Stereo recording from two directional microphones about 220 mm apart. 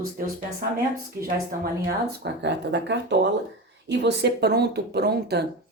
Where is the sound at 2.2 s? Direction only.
50° right (ahead or behind).